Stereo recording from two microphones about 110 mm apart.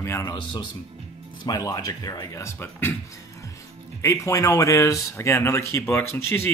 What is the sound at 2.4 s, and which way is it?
Speech, 20° left (ahead or behind).